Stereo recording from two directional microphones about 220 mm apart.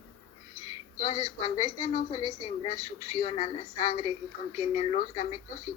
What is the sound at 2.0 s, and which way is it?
Speech, 20° left (ahead or behind).